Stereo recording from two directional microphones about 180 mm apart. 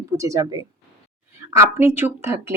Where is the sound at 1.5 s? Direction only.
15° right (ahead or behind).